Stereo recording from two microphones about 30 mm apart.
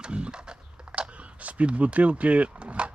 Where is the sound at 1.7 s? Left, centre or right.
Right.